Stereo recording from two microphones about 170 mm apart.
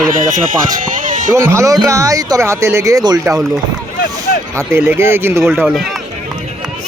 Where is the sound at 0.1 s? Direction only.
50° right (ahead or behind).